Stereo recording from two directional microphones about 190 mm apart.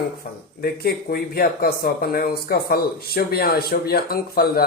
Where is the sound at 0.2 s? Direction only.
50° left (ahead or behind).